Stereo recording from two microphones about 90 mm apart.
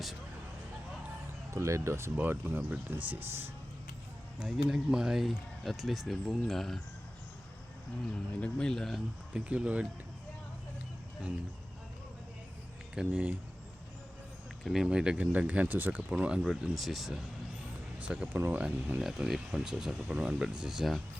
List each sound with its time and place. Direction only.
1.5 s speech: 35° right (ahead or behind)
4.4 s speech: 5° right (ahead or behind)
8.4 s speech: 10° left (ahead or behind)
9.3 s speech: 10° right (ahead or behind)
13.0 s speech: 10° right (ahead or behind)
14.6 s speech: 5° right (ahead or behind)
18.3 s speech: 20° right (ahead or behind)
19.0 s speech: 5° right (ahead or behind)